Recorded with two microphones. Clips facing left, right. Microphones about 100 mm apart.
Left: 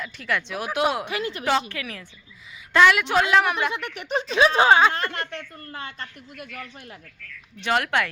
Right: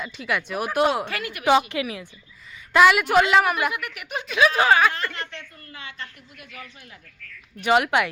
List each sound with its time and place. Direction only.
0.0 s speech: 15° right (ahead or behind)
1.0 s speech: 20° left (ahead or behind)
1.5 s a woman's voice: 15° right (ahead or behind)
3.7 s speech: 30° left (ahead or behind)
5.1 s a woman's voice: 50° left (ahead or behind)
7.6 s a woman's voice: 10° right (ahead or behind)